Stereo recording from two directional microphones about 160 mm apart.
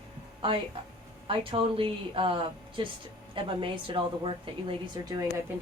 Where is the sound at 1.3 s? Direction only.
35° right (ahead or behind).